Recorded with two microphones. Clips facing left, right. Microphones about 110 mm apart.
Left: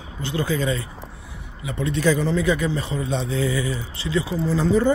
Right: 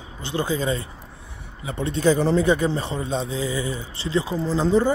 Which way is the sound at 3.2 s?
20° right (ahead or behind).